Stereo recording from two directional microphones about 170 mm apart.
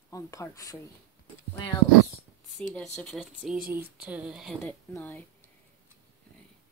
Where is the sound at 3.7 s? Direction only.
65° right (ahead or behind).